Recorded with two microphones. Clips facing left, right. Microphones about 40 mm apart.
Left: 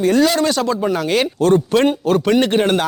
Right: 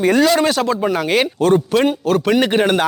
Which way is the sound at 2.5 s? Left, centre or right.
Centre.